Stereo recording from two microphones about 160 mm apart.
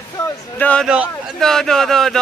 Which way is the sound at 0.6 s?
10° left (ahead or behind).